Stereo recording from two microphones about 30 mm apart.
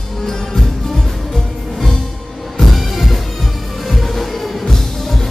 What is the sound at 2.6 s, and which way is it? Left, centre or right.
Music, centre.